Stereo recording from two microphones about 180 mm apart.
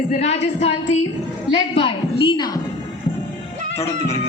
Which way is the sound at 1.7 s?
30° left (ahead or behind).